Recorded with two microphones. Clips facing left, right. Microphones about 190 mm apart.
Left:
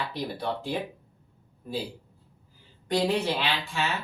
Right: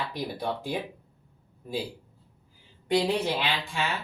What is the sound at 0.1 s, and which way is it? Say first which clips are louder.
Speech: even; 10° right (ahead or behind).